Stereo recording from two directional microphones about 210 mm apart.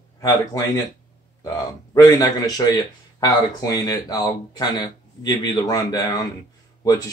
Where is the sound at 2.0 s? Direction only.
15° left (ahead or behind).